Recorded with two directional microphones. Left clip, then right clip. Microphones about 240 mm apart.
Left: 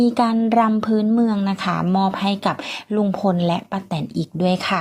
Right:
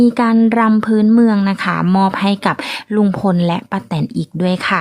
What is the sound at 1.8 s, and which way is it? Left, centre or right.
Speech, right.